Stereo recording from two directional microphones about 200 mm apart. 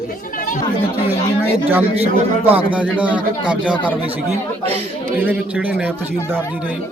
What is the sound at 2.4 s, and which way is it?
A man's voice, 5° right (ahead or behind).